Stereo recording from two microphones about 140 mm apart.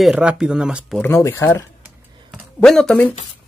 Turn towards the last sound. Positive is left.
turn(degrees=10)  # may be behind; listen again after turning